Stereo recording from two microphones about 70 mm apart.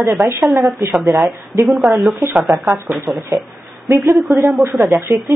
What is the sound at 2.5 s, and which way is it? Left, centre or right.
Speech, right.